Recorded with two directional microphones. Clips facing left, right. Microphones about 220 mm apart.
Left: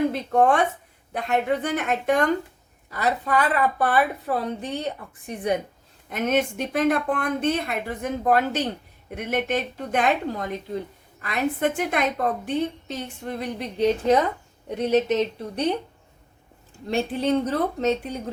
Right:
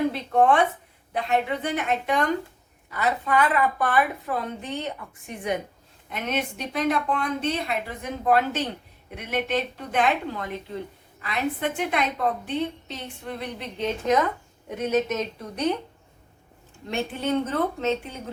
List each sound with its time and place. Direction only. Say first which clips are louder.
0.1 s a woman's voice: left 1 dB; 45° left (ahead or behind)
6.1 s a woman's voice: left 6 dB; 45° left (ahead or behind)
16.9 s a woman's voice: left 3 dB; 35° left (ahead or behind)